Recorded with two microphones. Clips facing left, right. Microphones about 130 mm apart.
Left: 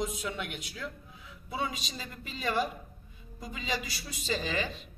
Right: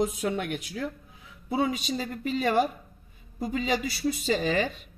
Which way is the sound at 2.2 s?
55° right (ahead or behind).